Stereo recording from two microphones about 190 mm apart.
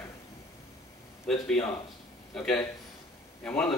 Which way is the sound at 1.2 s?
5° left (ahead or behind).